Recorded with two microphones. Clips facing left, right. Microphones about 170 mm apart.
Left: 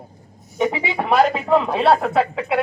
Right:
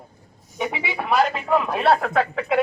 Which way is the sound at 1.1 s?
45° left (ahead or behind).